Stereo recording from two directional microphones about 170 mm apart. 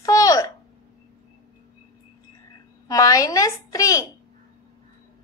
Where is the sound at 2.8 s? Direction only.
20° left (ahead or behind).